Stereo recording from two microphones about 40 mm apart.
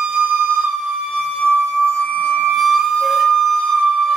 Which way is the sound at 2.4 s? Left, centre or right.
Centre.